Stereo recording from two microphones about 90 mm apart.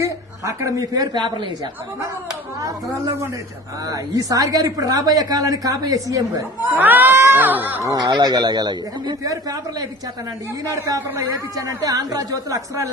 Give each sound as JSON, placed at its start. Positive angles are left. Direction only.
{"t": 0.0, "sound": "speech", "side_deg": -35}
{"t": 3.8, "sound": "a woman's voice", "side_deg": -45}
{"t": 6.7, "sound": "speech", "side_deg": -20}
{"t": 7.9, "sound": "a woman's voice", "side_deg": -50}
{"t": 11.1, "sound": "speech", "side_deg": -35}